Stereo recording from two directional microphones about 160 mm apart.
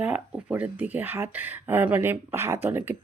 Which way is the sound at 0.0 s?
10° right (ahead or behind).